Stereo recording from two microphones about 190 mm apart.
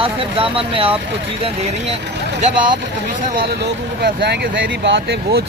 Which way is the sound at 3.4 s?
60° right (ahead or behind).